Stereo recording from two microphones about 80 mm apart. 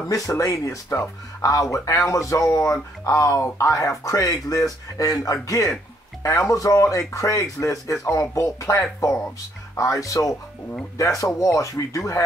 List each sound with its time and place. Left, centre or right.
0.0 s speech: left